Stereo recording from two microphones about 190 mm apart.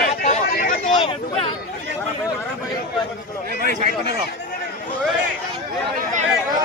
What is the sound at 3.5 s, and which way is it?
Speech, 50° right (ahead or behind).